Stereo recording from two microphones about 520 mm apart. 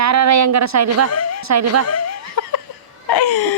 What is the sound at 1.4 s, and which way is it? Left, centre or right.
Speech, right.